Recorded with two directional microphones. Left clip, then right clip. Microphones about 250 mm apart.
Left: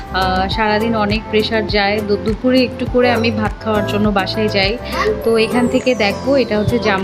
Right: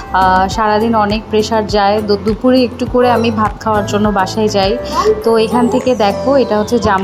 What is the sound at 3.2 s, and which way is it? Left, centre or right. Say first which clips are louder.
A woman's voice: right 4 dB; centre.